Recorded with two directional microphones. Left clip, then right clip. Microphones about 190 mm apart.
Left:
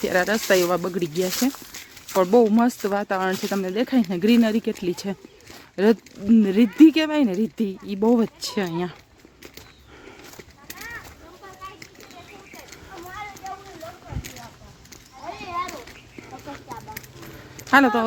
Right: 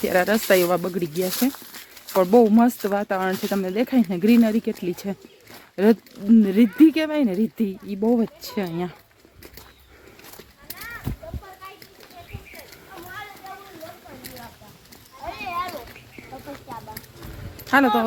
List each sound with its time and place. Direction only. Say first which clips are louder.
0.0 s speech: right 1 dB; centre (ahead or behind)
8.0 s speech: left 2 dB; 25° left (ahead or behind)
8.4 s speech: left 2 dB; 15° left (ahead or behind)
13.4 s clip-clop: left 4 dB; 5° left (ahead or behind)
17.7 s speech: left 1 dB; 15° left (ahead or behind)